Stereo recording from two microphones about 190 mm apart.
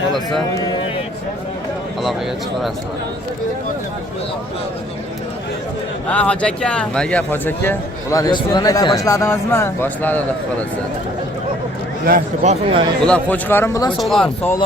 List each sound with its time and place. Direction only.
0.1 s speech: centre (ahead or behind)
6.1 s speech: 5° left (ahead or behind)
12.0 s a man's voice: 45° right (ahead or behind)
13.1 s speech: 10° left (ahead or behind)